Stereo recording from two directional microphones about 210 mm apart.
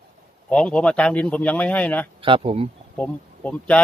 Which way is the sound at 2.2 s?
25° right (ahead or behind).